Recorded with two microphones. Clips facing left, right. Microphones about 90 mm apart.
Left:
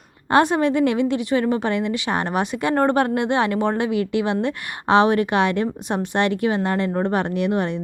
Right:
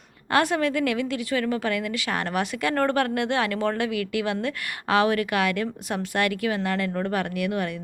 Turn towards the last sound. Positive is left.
turn(degrees=25)  # may be behind; listen again after turning